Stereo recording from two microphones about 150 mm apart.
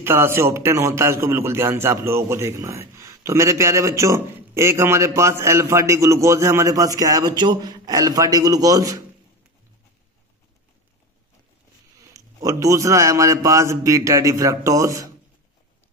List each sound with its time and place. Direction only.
0.0 s a man's voice: 15° right (ahead or behind)
12.0 s a man's voice: 20° right (ahead or behind)